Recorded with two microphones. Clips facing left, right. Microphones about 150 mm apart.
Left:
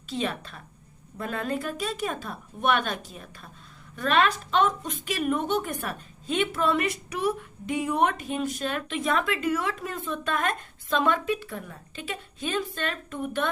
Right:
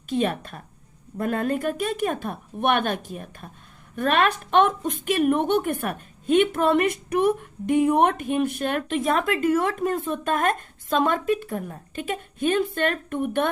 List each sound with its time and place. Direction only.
0.1 s a woman's voice: 50° right (ahead or behind)